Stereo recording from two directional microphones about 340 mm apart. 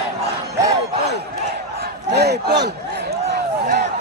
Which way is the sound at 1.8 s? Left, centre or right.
Right.